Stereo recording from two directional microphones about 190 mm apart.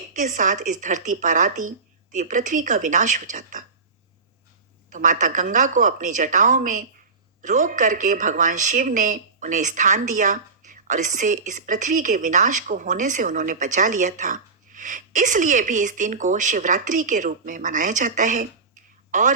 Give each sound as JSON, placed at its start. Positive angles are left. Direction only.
{"t": 0.1, "sound": "speech", "side_deg": -40}
{"t": 4.9, "sound": "speech", "side_deg": -40}